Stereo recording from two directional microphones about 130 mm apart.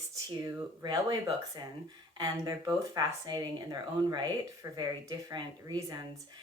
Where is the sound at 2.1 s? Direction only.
30° right (ahead or behind).